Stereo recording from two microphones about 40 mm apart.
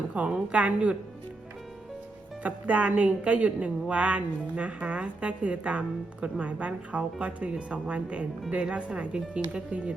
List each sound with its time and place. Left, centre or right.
0.3 s a woman's voice: right
2.4 s a woman's voice: right